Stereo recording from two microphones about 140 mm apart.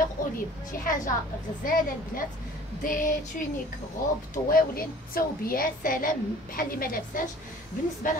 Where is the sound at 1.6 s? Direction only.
85° left.